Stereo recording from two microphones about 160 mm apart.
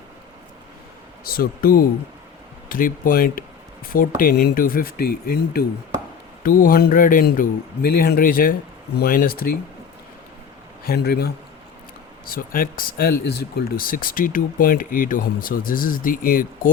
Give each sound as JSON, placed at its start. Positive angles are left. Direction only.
{"t": 1.2, "sound": "speech", "side_deg": 65}
{"t": 6.4, "sound": "speech", "side_deg": 60}
{"t": 10.8, "sound": "speech", "side_deg": 80}
{"t": 12.3, "sound": "speech", "side_deg": 60}